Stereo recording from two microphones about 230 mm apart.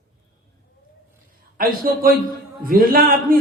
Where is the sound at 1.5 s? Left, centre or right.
Right.